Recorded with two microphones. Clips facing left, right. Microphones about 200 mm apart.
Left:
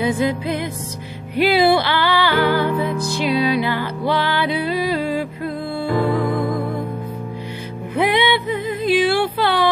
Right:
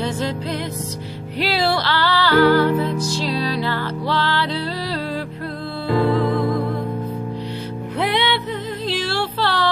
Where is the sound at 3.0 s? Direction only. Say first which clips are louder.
Left 1 dB; 55° left (ahead or behind).